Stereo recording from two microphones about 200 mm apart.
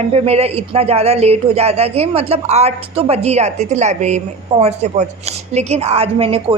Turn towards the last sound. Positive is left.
turn(degrees=-30)  # may be behind; listen again after turning